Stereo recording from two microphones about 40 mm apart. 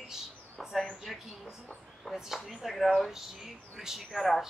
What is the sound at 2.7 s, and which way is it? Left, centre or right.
Speech, centre.